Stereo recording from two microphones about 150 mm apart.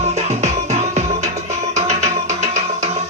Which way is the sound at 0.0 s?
50° right (ahead or behind).